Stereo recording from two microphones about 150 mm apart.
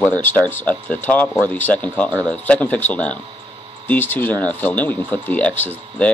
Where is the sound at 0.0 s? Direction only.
10° left (ahead or behind).